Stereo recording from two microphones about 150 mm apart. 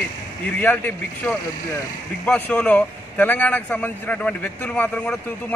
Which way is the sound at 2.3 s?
5° left (ahead or behind).